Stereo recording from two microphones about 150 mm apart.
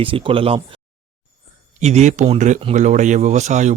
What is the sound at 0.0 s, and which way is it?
Speech, 35° right (ahead or behind).